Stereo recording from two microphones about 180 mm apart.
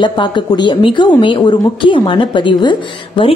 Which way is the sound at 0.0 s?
25° left (ahead or behind).